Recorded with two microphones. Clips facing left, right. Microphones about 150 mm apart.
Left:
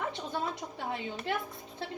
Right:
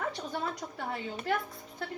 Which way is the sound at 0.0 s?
25° left (ahead or behind).